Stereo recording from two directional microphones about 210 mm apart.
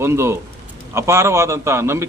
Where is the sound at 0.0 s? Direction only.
10° right (ahead or behind).